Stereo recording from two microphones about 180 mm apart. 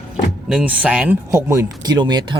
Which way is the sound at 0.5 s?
5° right (ahead or behind).